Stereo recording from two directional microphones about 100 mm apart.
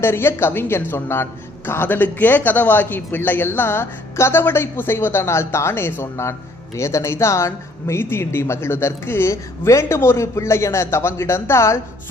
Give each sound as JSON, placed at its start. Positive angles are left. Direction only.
{"t": 0.0, "sound": "speech", "side_deg": 25}